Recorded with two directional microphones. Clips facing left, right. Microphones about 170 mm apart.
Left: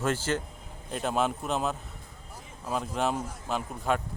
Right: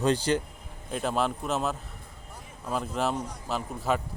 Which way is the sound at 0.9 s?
Centre (ahead or behind).